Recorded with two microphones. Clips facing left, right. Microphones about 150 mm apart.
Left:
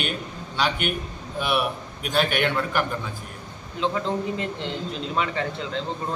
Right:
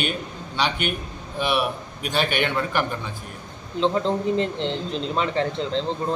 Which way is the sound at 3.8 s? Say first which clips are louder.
Right 4 dB; 30° right (ahead or behind).